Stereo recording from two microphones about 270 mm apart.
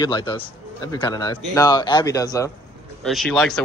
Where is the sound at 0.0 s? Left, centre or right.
Centre.